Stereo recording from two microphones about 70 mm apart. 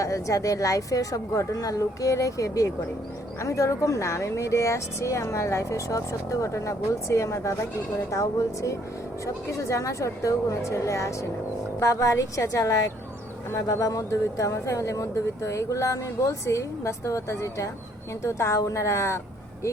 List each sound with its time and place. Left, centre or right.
0.0 s speech: left